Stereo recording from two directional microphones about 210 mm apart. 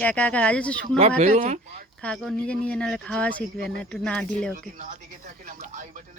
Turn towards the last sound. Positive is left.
turn(degrees=-40)  # may be behind; listen again after turning